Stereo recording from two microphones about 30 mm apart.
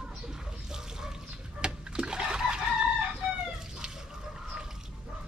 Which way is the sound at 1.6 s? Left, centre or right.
Right.